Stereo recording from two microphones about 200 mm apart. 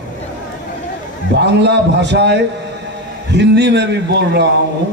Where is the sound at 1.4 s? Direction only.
60° right (ahead or behind).